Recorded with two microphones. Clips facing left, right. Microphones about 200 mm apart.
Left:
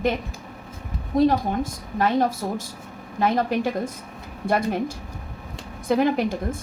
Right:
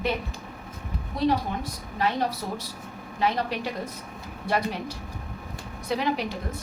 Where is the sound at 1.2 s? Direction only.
50° left (ahead or behind).